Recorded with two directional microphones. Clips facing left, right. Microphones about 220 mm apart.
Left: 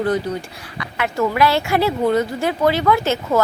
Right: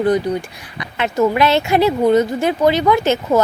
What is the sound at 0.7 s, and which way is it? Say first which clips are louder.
A woman's voice: right 4 dB; 20° right (ahead or behind).